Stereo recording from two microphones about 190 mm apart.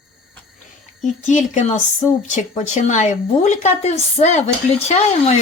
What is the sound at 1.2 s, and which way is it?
Speech, 40° left (ahead or behind).